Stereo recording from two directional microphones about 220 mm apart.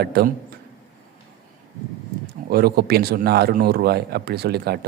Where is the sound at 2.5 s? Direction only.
45° right (ahead or behind).